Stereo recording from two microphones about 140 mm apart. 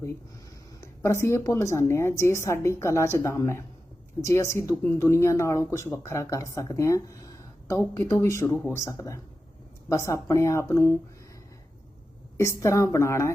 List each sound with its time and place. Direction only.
0.8 s speech: 20° left (ahead or behind)
12.4 s speech: 20° left (ahead or behind)